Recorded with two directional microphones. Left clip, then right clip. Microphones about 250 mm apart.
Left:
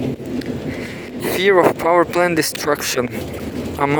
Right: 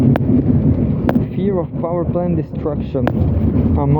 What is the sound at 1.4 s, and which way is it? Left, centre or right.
Speech, left.